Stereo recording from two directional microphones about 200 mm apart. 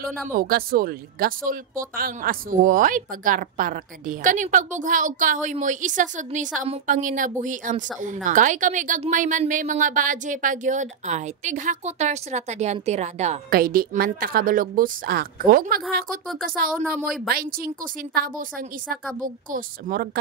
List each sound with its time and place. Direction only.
0.0 s speech: centre (ahead or behind)
0.3 s speech: 45° right (ahead or behind)
13.5 s a woman's voice: 45° right (ahead or behind)
16.8 s a woman's voice: centre (ahead or behind)
17.3 s a woman's voice: 45° right (ahead or behind)